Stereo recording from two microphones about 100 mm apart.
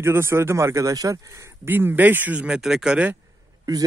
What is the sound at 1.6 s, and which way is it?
Speech, 20° right (ahead or behind).